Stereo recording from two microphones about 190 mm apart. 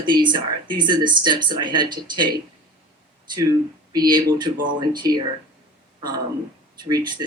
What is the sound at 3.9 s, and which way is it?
Speech, 20° right (ahead or behind).